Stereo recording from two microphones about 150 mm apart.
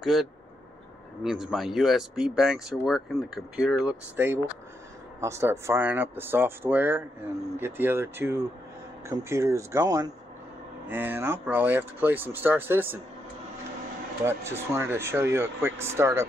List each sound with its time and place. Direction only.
0.0 s speech: centre (ahead or behind)
14.2 s speech: 15° right (ahead or behind)